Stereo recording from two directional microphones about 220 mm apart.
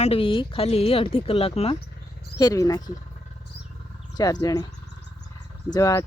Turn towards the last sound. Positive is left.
turn(degrees=15)  # may be behind; listen again after turning